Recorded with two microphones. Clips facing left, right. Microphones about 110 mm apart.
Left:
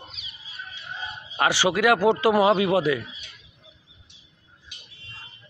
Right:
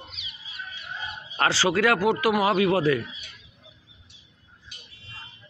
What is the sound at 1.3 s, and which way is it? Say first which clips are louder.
Speech: left 1 dB; 20° left (ahead or behind).